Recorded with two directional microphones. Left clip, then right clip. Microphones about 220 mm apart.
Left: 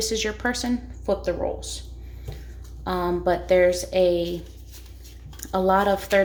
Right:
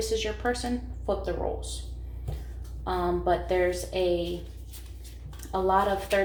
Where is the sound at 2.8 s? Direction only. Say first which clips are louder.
Left 3 dB; 45° left (ahead or behind).